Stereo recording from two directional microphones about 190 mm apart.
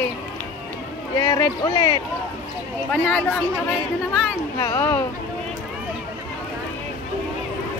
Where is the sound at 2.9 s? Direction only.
5° left (ahead or behind).